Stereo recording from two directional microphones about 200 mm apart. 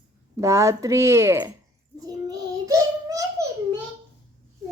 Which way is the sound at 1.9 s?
20° right (ahead or behind).